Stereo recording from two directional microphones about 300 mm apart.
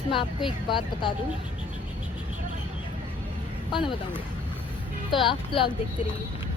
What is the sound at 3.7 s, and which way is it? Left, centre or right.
Speech, centre.